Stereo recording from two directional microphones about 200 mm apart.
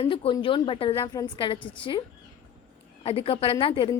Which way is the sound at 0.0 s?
25° left (ahead or behind).